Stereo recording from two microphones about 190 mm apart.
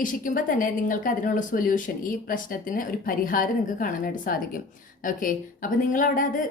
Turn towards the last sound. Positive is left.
turn(degrees=45)  # may be behind; listen again after turning